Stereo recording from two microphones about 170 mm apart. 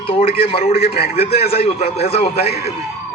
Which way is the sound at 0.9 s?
65° left (ahead or behind).